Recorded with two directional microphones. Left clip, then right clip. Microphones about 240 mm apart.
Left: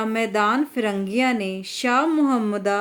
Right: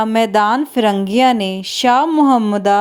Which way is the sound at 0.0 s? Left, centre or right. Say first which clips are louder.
Right 8 dB; right.